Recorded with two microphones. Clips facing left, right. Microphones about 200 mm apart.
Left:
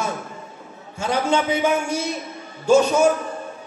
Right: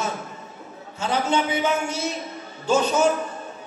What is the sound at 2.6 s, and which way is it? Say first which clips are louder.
Speech: left 4 dB; 10° left (ahead or behind).